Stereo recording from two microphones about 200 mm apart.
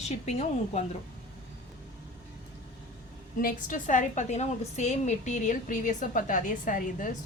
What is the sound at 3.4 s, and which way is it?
A woman's voice, 40° left (ahead or behind).